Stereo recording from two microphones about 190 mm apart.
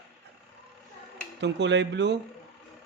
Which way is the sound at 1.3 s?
65° right (ahead or behind).